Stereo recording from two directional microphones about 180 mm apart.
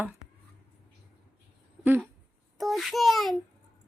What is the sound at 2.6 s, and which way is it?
Speech, centre (ahead or behind).